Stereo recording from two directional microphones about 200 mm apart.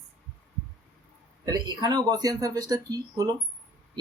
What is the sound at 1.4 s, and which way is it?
Speech, 20° right (ahead or behind).